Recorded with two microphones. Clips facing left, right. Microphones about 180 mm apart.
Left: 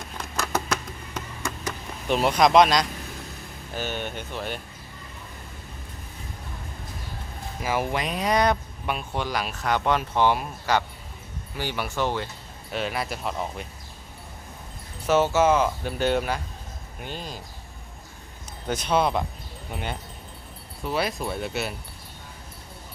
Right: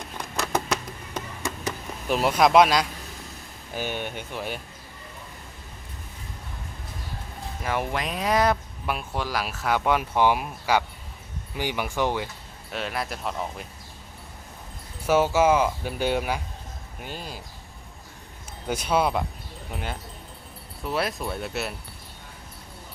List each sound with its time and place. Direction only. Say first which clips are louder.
0.2 s a sound: right 1 dB; 15° right (ahead or behind)
2.0 s speech: even; 5° right (ahead or behind)
7.6 s speech: left 2 dB; centre (ahead or behind); by 12.3 s 15° right (ahead or behind)
12.7 s speech: left 2 dB; centre (ahead or behind)
15.0 s speech: even; 10° right (ahead or behind)
18.7 s speech: even; 10° right (ahead or behind)